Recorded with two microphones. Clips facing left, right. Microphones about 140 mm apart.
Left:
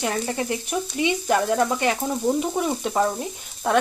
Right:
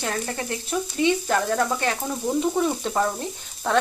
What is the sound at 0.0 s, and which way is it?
Frying, 15° left (ahead or behind).